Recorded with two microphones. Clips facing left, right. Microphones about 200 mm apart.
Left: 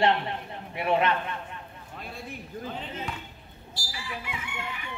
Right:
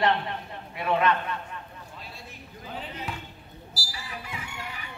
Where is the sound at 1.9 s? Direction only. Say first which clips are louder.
Left 7 dB; 55° left (ahead or behind).